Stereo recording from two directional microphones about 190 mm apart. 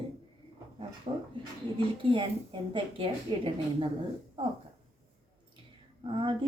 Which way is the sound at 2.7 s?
30° right (ahead or behind).